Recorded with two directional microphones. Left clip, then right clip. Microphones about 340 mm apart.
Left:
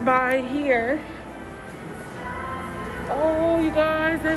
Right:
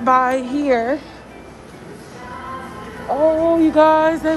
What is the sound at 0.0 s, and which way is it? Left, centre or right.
Speech, centre.